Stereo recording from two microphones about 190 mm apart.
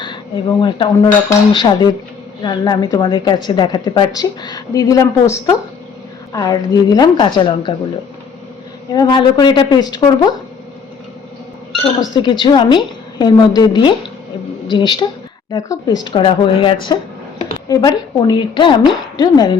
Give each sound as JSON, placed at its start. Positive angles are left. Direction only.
{"t": 0.0, "sound": "speech", "side_deg": 25}
{"t": 8.9, "sound": "speech", "side_deg": 25}
{"t": 12.1, "sound": "speech", "side_deg": 25}
{"t": 16.0, "sound": "speech", "side_deg": 25}